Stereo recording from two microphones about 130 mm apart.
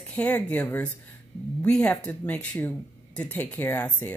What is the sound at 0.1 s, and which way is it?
Speech, 10° left (ahead or behind).